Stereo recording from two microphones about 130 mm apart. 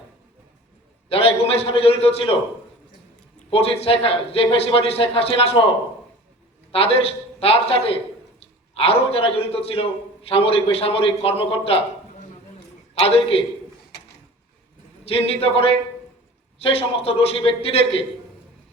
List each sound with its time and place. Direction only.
1.1 s a man's voice: 50° left (ahead or behind)
3.5 s a man's voice: 50° left (ahead or behind)
12.9 s a man's voice: 50° left (ahead or behind)
15.0 s a man's voice: 50° left (ahead or behind)
16.6 s a man's voice: 50° left (ahead or behind)